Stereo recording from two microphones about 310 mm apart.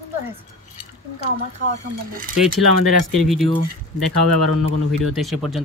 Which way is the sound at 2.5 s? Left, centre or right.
Right.